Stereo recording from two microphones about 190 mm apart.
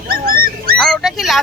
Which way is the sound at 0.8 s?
Centre (ahead or behind).